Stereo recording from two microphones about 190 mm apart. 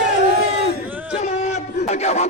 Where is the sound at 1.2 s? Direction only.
35° left (ahead or behind).